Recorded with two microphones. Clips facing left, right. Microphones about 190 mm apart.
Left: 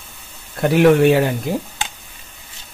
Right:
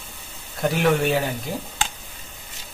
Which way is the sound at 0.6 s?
65° left (ahead or behind).